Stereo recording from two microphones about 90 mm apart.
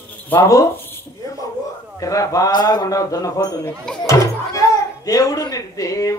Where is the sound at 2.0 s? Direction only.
40° left (ahead or behind).